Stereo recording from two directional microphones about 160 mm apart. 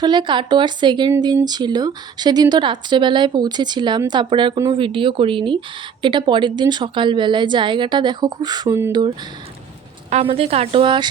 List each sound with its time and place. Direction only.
0.0 s speech: 30° right (ahead or behind)
10.1 s a woman's voice: 40° right (ahead or behind)